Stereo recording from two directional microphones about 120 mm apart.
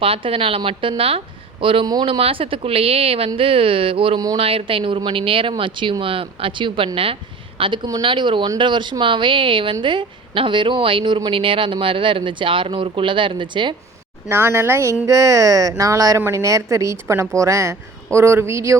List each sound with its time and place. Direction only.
0.0 s speech: 50° right (ahead or behind)
14.3 s speech: 20° right (ahead or behind)